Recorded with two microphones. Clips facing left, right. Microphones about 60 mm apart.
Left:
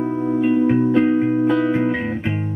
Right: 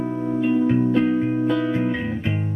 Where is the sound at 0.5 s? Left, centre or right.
Centre.